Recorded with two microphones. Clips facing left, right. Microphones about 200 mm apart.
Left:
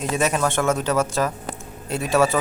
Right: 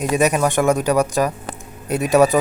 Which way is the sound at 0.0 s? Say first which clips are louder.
Right 4 dB; 15° right (ahead or behind).